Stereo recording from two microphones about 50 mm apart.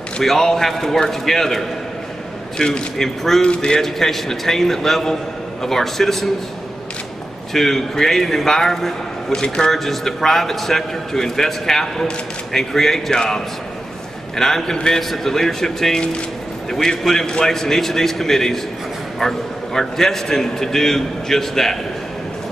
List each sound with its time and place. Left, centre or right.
0.2 s a man's voice: centre
3.8 s a man's voice: centre
7.5 s a man's voice: centre